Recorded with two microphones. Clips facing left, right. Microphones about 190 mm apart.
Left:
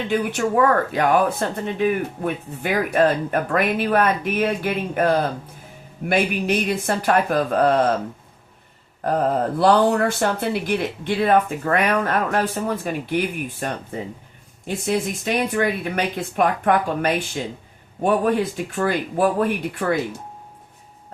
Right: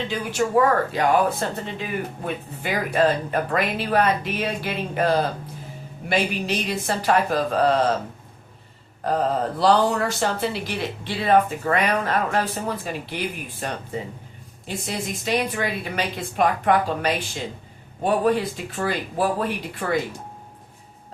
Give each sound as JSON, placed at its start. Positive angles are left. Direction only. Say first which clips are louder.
{"t": 0.1, "sound": "speech", "louder": "left 2 dB", "side_deg": 55}
{"t": 9.0, "sound": "speech", "louder": "left 2 dB", "side_deg": 50}
{"t": 14.8, "sound": "speech", "louder": "left 4 dB", "side_deg": 55}